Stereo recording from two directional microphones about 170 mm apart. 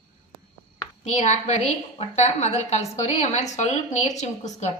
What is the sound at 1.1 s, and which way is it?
A woman's voice, 40° left (ahead or behind).